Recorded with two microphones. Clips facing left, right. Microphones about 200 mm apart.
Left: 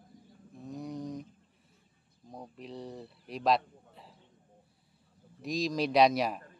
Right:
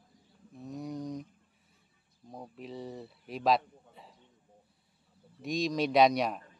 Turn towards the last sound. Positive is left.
turn(degrees=0)  # may be behind; listen again after turning